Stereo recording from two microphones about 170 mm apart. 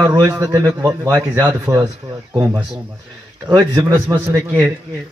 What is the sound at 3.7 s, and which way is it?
Speech, 20° right (ahead or behind).